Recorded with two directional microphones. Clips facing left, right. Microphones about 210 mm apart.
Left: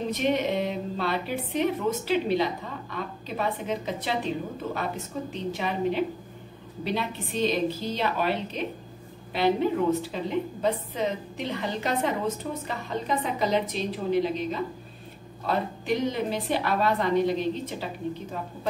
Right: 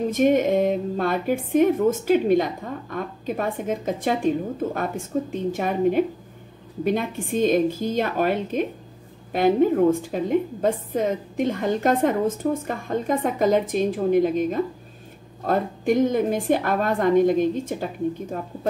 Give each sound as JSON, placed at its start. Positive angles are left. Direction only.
{"t": 0.1, "sound": "a woman's voice", "side_deg": -50}